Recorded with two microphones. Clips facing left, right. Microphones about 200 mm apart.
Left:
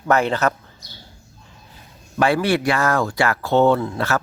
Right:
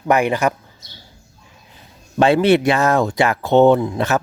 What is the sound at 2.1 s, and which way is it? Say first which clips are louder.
Speech: right 5 dB; 25° right (ahead or behind).